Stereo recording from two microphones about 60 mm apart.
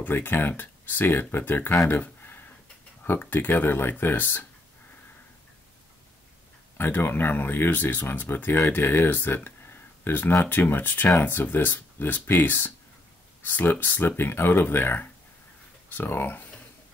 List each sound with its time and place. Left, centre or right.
0.0 s speech: left
2.2 s a sound: left
3.1 s speech: left
6.8 s speech: left